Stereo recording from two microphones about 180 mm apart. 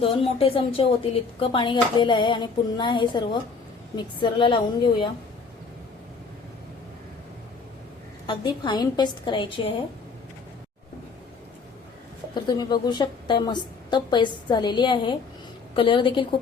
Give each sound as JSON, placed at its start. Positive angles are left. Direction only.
{"t": 0.0, "sound": "speech", "side_deg": 30}
{"t": 8.3, "sound": "speech", "side_deg": 25}
{"t": 12.3, "sound": "speech", "side_deg": 25}